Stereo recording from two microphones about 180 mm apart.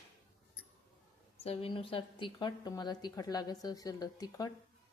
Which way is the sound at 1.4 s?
35° left (ahead or behind).